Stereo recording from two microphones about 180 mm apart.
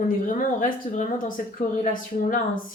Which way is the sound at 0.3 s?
45° left (ahead or behind).